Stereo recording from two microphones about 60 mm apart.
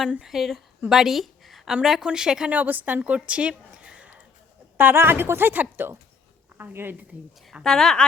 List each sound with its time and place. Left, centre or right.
0.3 s a woman's voice: centre
2.5 s speech: right
4.8 s a woman's voice: right
7.6 s a woman's voice: centre